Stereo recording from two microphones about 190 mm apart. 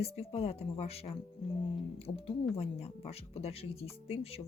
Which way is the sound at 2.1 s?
25° left (ahead or behind).